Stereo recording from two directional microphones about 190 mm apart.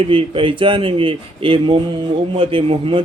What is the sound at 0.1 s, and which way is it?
Speech, 30° right (ahead or behind).